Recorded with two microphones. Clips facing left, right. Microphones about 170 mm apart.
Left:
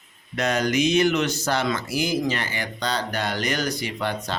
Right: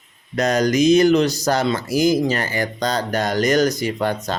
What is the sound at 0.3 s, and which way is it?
Speech, 40° right (ahead or behind).